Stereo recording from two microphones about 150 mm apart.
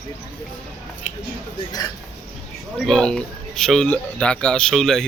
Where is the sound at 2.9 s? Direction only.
5° left (ahead or behind).